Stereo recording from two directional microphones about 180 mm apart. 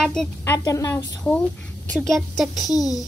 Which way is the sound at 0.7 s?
15° left (ahead or behind).